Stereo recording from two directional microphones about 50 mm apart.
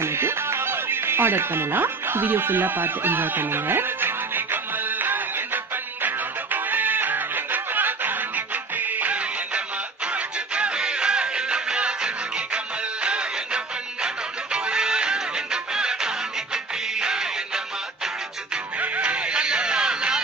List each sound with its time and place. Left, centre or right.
0.0 s music: right; by 17.3 s centre
18.8 s music: right